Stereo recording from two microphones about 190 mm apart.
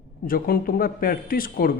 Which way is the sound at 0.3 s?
50° left (ahead or behind).